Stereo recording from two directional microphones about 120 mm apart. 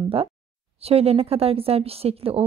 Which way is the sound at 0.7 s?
55° right (ahead or behind).